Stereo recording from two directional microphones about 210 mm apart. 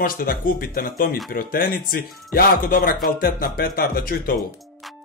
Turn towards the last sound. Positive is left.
turn(degrees=45)  # may be behind; listen again after turning